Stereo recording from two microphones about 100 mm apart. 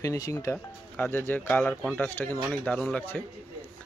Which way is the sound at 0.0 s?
35° left (ahead or behind).